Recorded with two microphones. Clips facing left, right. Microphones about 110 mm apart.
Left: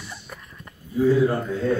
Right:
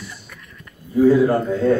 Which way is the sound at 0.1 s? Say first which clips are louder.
Left 1 dB; 35° left (ahead or behind).